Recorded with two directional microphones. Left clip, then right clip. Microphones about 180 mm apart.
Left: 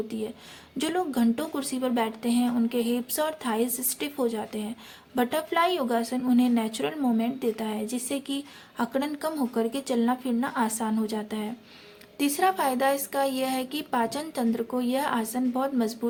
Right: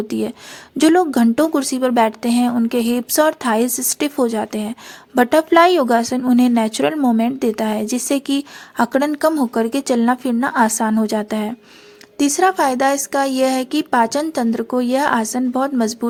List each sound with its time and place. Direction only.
0.1 s a woman's voice: 50° right (ahead or behind)